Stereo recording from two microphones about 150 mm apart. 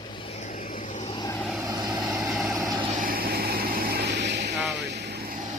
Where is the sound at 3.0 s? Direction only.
80° right.